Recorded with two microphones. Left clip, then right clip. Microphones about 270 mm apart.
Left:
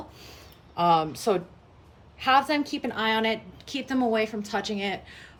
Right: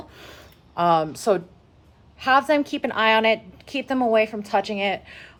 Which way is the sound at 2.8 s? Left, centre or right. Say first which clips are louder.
Right 7 dB; right.